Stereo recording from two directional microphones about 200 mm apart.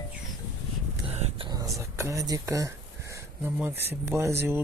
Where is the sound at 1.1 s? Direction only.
35° right (ahead or behind).